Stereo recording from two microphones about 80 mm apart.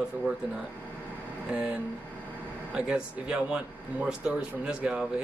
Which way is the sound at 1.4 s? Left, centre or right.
Centre.